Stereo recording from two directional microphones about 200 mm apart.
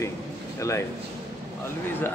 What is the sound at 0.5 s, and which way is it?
Speech, 15° left (ahead or behind).